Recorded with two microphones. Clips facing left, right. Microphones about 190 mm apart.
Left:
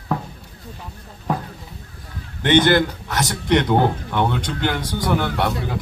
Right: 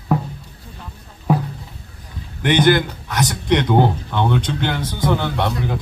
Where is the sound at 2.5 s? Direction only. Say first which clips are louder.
Even; 15° right (ahead or behind).